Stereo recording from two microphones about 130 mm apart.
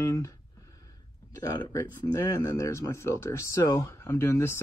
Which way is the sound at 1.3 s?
30° left (ahead or behind).